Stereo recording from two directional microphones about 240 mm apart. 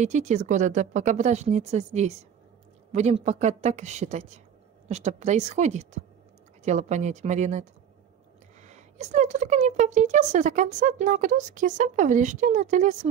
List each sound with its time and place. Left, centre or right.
0.0 s speech: right
8.6 s speech: right